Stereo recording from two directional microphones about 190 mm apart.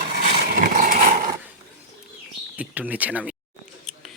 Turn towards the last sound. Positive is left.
turn(degrees=-5)  # may be behind; listen again after turning